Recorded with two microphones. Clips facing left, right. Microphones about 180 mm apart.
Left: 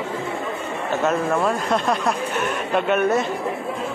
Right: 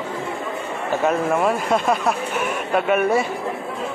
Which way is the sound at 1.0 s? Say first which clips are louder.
Right 2 dB; 10° right (ahead or behind).